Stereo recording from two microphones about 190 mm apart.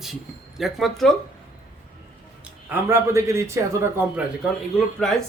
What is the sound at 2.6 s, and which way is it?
A man's voice, 10° right (ahead or behind).